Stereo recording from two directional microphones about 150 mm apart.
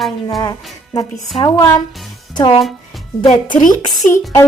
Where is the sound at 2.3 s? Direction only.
35° left (ahead or behind).